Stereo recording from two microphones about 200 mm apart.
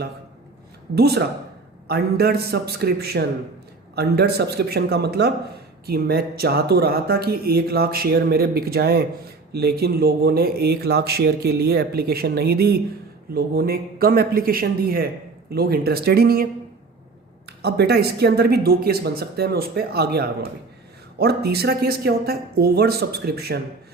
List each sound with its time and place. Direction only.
0.9 s speech: 50° right (ahead or behind)
17.6 s speech: 55° right (ahead or behind)